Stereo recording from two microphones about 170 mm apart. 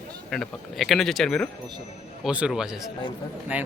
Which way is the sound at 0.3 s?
Centre (ahead or behind).